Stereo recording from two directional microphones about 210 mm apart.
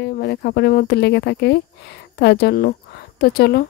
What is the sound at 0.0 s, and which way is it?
Speech, 50° left (ahead or behind).